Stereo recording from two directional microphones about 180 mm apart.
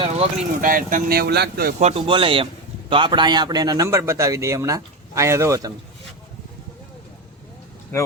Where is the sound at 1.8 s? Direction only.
35° right (ahead or behind); by 5.7 s 15° right (ahead or behind).